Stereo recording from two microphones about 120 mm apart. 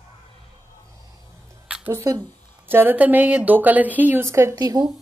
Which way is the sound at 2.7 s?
15° right (ahead or behind).